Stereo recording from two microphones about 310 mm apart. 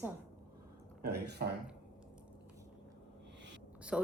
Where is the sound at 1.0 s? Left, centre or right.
Right.